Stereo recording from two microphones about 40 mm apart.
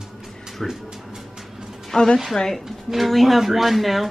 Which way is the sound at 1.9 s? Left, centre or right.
Centre.